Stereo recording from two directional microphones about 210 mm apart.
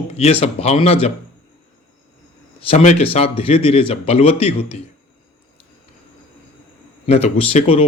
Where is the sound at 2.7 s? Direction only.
30° left (ahead or behind).